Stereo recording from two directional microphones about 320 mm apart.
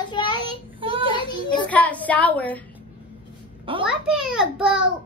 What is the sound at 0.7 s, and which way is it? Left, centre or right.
Child singing, centre.